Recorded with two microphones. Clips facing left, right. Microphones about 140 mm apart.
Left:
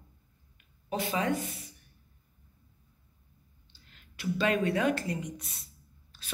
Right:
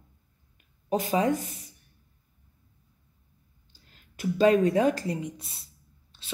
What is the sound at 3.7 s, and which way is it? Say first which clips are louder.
A woman's voice: right 4 dB; 40° right (ahead or behind).